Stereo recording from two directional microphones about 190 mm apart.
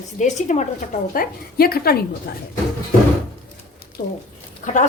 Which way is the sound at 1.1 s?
50° left (ahead or behind).